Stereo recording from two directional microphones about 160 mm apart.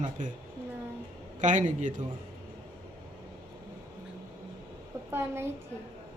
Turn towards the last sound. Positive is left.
turn(degrees=-15)  # may be behind; listen again after turning